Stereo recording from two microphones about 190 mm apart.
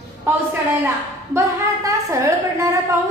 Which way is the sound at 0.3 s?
10° right (ahead or behind).